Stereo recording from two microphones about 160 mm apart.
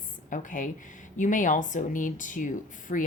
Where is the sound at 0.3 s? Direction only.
55° left (ahead or behind).